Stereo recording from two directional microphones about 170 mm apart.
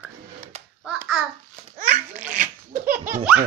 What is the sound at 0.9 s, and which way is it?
Babbling, 5° right (ahead or behind).